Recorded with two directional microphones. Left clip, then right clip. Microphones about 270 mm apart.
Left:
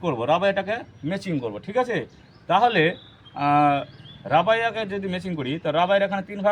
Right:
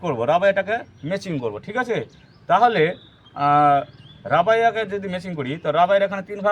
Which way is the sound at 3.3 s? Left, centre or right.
Right.